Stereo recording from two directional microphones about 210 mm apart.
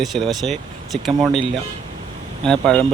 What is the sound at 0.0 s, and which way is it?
Speech, centre (ahead or behind).